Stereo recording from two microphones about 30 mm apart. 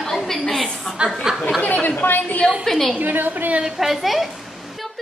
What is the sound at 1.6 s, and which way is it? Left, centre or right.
Chatter, left.